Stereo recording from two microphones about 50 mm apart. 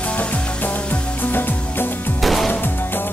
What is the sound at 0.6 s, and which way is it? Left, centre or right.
Music, left.